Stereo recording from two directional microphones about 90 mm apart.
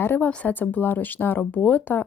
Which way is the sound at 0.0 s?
20° left (ahead or behind).